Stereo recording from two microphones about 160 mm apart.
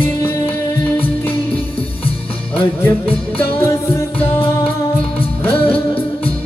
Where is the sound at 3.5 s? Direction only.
15° left (ahead or behind).